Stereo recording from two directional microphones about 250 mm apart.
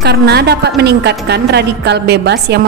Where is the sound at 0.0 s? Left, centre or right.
Right.